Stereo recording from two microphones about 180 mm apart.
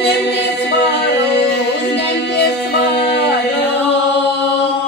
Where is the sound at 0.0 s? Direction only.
65° left (ahead or behind).